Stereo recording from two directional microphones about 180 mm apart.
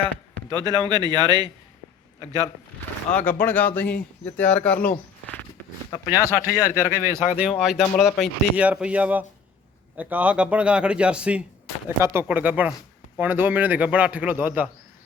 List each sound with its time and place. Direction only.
0.5 s speech: 25° right (ahead or behind)
3.2 s speech: 10° left (ahead or behind)
4.4 s bird: 5° left (ahead or behind)
5.9 s speech: 20° left (ahead or behind)
6.6 s a man's voice: 15° right (ahead or behind)
7.3 s a man's voice: 5° right (ahead or behind)